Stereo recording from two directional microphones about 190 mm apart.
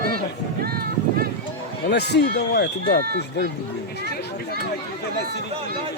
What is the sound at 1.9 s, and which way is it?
Speech, 60° left (ahead or behind).